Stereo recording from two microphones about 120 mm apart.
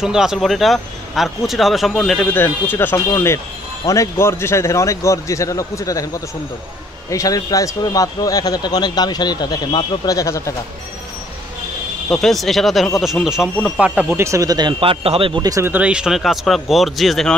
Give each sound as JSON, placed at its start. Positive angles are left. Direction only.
{"t": 0.0, "sound": "a man's voice", "side_deg": -5}
{"t": 12.1, "sound": "speech", "side_deg": 5}
{"t": 15.4, "sound": "speech", "side_deg": -30}
{"t": 15.7, "sound": "speech", "side_deg": -10}